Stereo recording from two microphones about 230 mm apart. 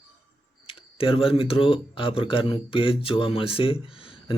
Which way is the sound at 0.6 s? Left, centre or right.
Left.